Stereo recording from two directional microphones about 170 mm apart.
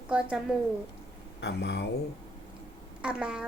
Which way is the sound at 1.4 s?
90° left.